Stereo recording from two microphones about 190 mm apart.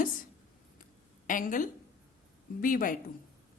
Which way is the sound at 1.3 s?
45° left (ahead or behind).